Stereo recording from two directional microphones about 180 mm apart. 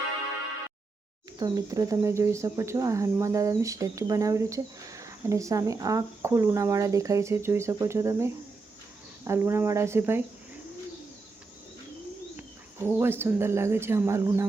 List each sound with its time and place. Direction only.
1.4 s speech: 20° right (ahead or behind)
12.4 s speech: 10° right (ahead or behind)